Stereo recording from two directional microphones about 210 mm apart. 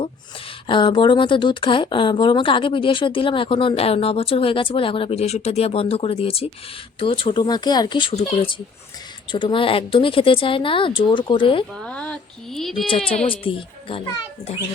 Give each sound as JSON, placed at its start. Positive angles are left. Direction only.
{"t": 0.7, "sound": "speech", "side_deg": 25}
{"t": 11.8, "sound": "speech", "side_deg": 5}
{"t": 13.4, "sound": "speech", "side_deg": 25}